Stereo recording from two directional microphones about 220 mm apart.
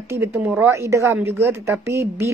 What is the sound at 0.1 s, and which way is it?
A woman's voice, 10° right (ahead or behind).